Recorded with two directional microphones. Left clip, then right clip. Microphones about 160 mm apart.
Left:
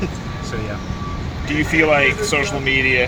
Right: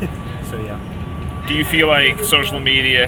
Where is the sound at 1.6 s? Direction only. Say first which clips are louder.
Right 1 dB; 10° left (ahead or behind).